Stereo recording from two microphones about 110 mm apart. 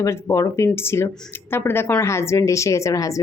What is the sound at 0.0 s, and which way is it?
Speech, 25° left (ahead or behind).